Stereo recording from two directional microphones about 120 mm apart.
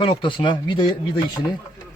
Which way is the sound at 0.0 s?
45° left (ahead or behind).